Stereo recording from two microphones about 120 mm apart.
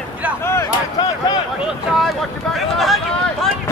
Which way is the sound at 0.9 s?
30° left (ahead or behind).